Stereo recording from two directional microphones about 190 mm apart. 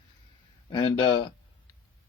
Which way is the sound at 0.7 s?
25° left (ahead or behind).